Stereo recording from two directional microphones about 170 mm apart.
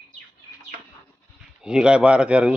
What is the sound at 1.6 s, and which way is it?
Speech, 5° right (ahead or behind).